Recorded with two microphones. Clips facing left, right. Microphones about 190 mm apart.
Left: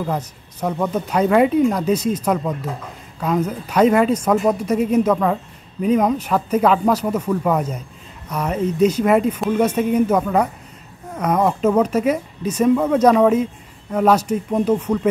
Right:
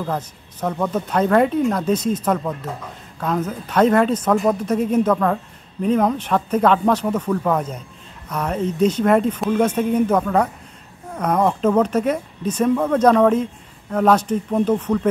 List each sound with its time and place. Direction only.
0.0 s speech: 10° left (ahead or behind)